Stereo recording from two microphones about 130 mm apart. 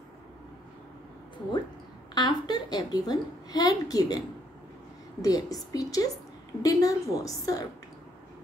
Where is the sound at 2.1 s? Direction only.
35° left (ahead or behind).